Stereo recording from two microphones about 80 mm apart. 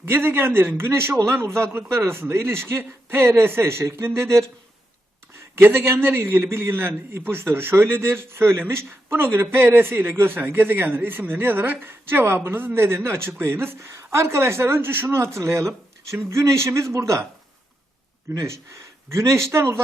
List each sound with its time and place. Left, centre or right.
0.0 s a man's voice: right
5.5 s a man's voice: right
18.3 s a man's voice: right